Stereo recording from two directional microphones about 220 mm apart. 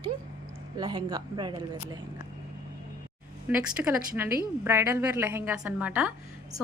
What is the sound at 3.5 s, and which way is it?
A woman's voice, 5° right (ahead or behind).